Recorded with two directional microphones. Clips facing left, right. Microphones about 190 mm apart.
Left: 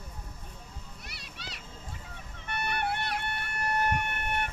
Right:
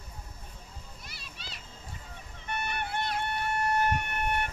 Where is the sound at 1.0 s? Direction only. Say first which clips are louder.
Left 2 dB; 70° left (ahead or behind).